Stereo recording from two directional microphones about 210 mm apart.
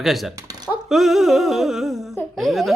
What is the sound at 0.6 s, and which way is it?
Speech, centre (ahead or behind).